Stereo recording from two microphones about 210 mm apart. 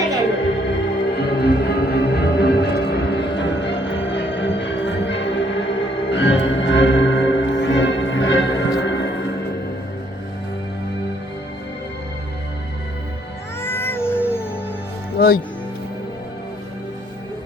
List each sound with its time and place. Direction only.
0.6 s music: 50° left (ahead or behind)
13.6 s cat: 10° left (ahead or behind)